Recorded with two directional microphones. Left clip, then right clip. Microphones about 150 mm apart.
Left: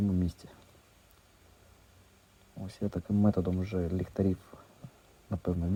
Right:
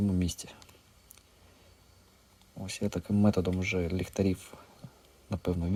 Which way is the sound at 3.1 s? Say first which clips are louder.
Right 1 dB; 20° right (ahead or behind).